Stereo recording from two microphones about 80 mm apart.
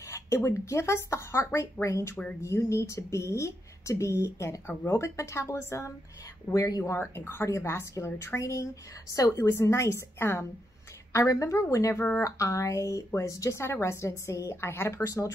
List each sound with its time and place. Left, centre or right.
0.0 s speech: left
6.5 s speech: left
11.1 s speech: left